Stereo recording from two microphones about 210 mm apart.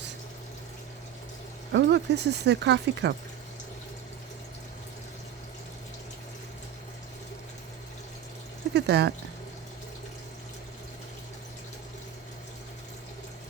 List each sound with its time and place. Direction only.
1.7 s speech: 55° right (ahead or behind)
8.7 s speech: 55° right (ahead or behind)